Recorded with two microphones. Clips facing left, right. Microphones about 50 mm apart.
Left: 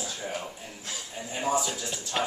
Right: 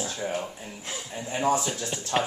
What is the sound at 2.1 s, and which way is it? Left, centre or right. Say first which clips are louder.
Speech: right 3 dB; right.